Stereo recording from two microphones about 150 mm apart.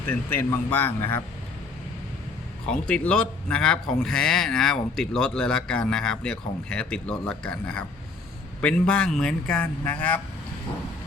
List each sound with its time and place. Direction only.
0.1 s a man's voice: 15° left (ahead or behind)
2.6 s a man's voice: 5° left (ahead or behind)